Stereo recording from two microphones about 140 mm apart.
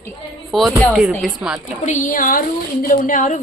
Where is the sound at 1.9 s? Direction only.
65° left (ahead or behind).